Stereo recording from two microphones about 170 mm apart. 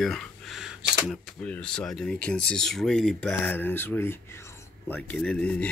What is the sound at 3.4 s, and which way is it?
Speech, 10° left (ahead or behind).